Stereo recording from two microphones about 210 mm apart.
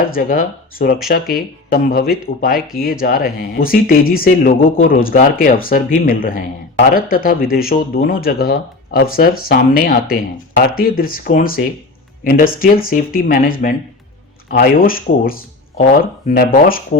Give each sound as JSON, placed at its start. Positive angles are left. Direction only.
{"t": 0.0, "sound": "speech", "side_deg": 40}